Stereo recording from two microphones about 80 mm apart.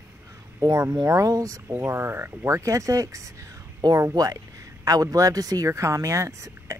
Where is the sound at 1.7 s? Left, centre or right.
Right.